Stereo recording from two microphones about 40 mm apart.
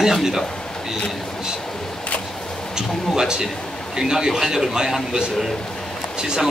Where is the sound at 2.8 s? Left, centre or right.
Centre.